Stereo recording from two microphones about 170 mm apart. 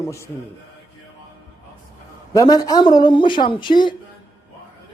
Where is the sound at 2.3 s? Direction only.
20° left (ahead or behind).